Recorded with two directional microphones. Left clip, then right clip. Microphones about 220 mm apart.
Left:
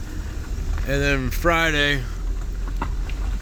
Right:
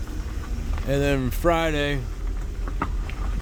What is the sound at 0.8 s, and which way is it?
Speech, 15° right (ahead or behind).